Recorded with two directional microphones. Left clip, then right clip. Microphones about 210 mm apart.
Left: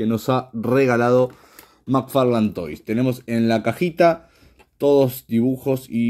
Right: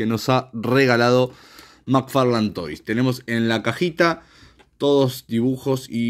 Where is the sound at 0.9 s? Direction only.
25° right (ahead or behind).